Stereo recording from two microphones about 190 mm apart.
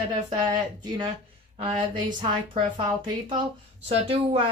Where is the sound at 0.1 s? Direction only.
25° right (ahead or behind).